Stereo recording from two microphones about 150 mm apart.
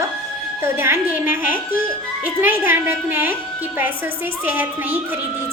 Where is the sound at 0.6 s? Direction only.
15° right (ahead or behind).